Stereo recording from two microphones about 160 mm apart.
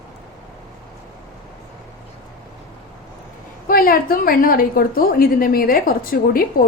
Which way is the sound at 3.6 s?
65° left (ahead or behind).